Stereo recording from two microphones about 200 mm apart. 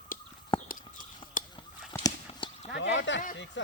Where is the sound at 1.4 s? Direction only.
40° left (ahead or behind).